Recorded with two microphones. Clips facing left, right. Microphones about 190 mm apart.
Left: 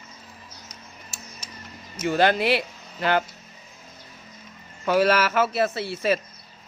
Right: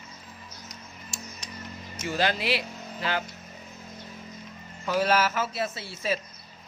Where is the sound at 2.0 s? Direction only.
55° left (ahead or behind).